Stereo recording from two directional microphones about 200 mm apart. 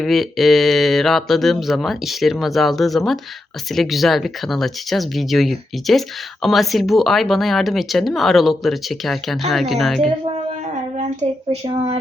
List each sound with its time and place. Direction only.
0.0 s speech: centre (ahead or behind)
10.9 s speech: 35° right (ahead or behind)